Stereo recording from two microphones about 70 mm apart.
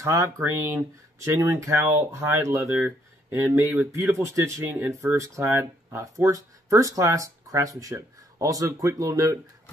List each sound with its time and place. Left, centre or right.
0.0 s speech: right
2.6 s speech: right